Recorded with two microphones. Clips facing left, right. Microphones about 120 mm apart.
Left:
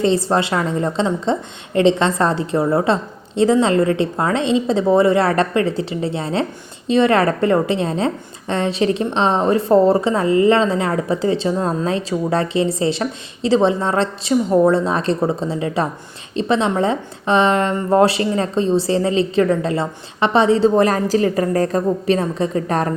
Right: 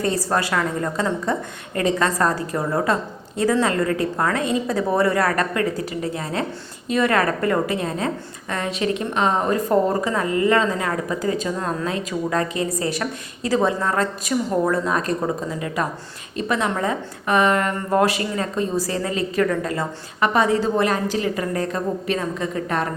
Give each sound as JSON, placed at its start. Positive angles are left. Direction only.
{"t": 0.0, "sound": "a woman's voice", "side_deg": 25}